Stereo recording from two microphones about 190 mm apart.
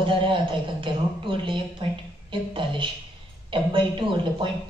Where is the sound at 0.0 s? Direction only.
25° right (ahead or behind).